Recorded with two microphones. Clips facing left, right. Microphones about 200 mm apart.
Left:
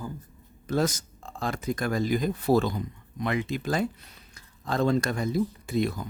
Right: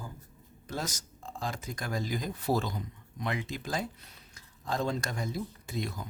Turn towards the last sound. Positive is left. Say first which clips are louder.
# left 9 dB
turn(degrees=65)  # may be behind; listen again after turning